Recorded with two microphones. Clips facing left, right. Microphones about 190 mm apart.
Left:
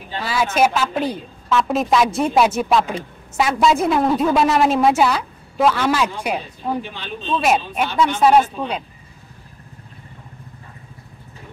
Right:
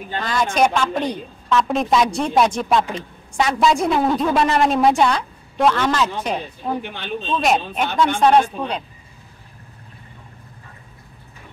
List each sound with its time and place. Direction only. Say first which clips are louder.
0.2 s a woman's voice: left 1 dB; 5° left (ahead or behind)
6.8 s speech: even; 60° right (ahead or behind)
7.3 s a woman's voice: left 1 dB; 5° left (ahead or behind)